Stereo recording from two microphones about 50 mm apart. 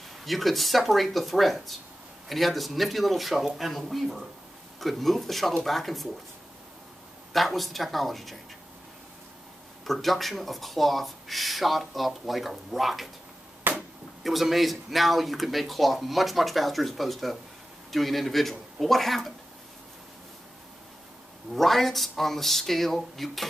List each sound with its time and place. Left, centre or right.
0.2 s speech: centre
7.3 s speech: centre
9.8 s speech: centre
13.7 s a sound: right
14.2 s speech: centre
21.5 s speech: centre